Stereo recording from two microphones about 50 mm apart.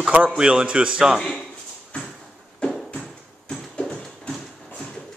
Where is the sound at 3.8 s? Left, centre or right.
Centre.